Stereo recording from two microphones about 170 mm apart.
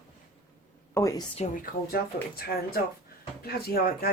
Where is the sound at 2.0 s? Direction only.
65° left (ahead or behind).